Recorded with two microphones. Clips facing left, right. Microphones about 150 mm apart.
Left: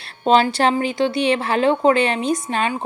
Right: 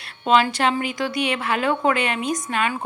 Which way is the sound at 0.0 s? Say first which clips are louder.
Left 3 dB; 35° left (ahead or behind).